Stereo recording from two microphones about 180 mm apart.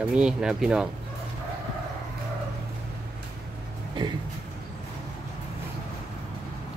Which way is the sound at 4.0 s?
25° right (ahead or behind).